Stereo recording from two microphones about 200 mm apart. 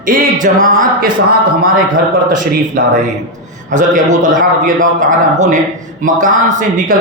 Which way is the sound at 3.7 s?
40° right (ahead or behind).